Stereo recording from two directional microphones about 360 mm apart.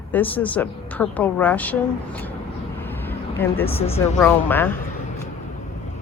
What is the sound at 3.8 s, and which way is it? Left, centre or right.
Speech, centre.